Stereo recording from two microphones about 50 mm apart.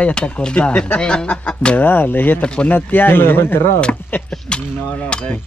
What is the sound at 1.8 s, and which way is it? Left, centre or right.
Speech, left.